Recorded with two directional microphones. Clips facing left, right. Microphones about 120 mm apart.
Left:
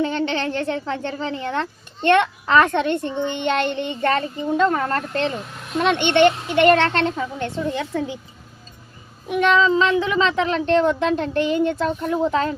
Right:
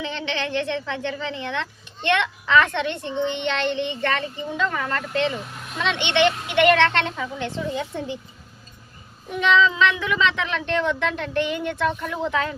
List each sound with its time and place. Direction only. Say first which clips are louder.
0.0 s speech: left 6 dB; 45° left (ahead or behind)
9.3 s speech: left 3 dB; 50° left (ahead or behind); by 12.5 s 35° left (ahead or behind)